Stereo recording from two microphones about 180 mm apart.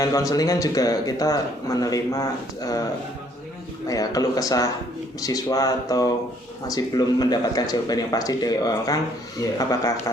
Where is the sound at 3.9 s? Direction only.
20° left (ahead or behind).